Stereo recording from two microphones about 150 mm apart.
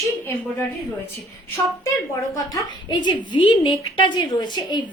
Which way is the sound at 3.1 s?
30° left (ahead or behind).